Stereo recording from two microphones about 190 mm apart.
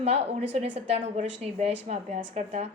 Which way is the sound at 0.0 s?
35° right (ahead or behind).